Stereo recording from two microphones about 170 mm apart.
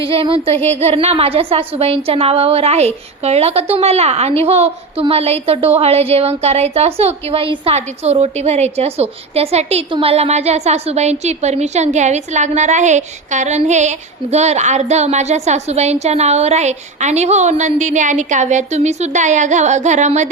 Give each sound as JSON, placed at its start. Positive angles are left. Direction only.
{"t": 0.0, "sound": "a woman's voice", "side_deg": -30}